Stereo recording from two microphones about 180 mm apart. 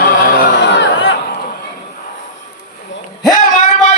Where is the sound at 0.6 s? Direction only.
85° left.